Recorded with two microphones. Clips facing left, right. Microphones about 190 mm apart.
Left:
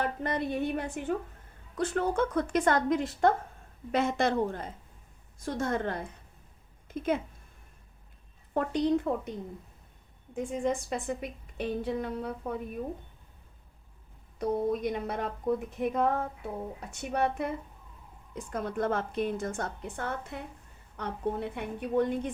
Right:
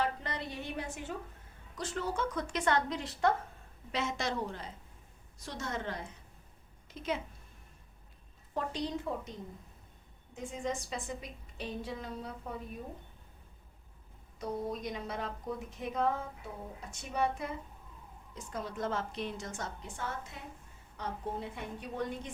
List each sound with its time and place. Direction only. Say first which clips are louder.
0.0 s a woman's voice: left 5 dB; 50° left (ahead or behind)
8.5 s a woman's voice: left 9 dB; 60° left (ahead or behind)
10.3 s a woman's voice: left 7 dB; 55° left (ahead or behind)
14.3 s a woman's voice: left 8 dB; 55° left (ahead or behind)